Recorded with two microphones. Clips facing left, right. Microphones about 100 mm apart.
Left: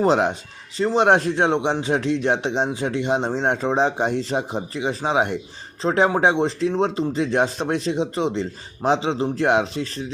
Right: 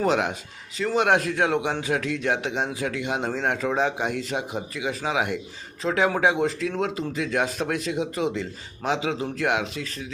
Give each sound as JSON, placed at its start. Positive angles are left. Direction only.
{"t": 0.0, "sound": "a man's voice", "side_deg": 30}